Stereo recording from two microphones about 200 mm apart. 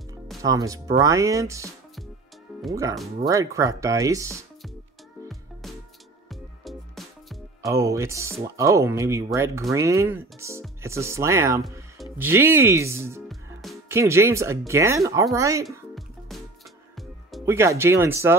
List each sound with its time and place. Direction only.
0.4 s speech: 15° right (ahead or behind)
2.7 s speech: 15° right (ahead or behind)
5.3 s music: centre (ahead or behind)
7.6 s speech: 15° right (ahead or behind)
13.3 s music: centre (ahead or behind)
13.8 s speech: 15° right (ahead or behind)
17.5 s speech: 15° right (ahead or behind)